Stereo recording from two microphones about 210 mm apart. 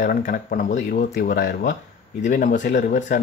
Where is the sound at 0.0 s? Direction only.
40° left (ahead or behind).